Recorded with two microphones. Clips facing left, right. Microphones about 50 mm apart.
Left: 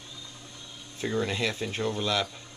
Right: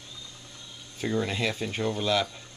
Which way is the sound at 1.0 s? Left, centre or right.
Centre.